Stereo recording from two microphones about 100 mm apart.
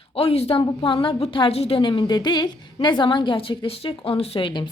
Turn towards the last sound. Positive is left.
turn(degrees=70)  # may be behind; listen again after turning